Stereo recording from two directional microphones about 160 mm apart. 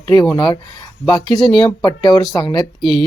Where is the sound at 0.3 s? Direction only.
30° left (ahead or behind).